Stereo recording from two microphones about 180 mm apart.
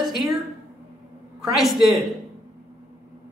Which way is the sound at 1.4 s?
Centre (ahead or behind).